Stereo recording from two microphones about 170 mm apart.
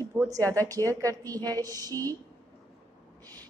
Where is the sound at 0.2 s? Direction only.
15° right (ahead or behind).